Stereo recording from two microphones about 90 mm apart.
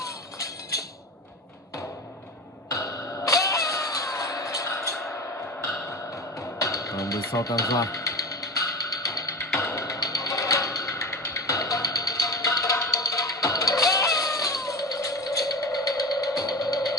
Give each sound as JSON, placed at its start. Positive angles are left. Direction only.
{"t": 0.0, "sound": "music", "side_deg": 40}
{"t": 2.7, "sound": "music", "side_deg": 40}
{"t": 9.6, "sound": "a sound", "side_deg": 35}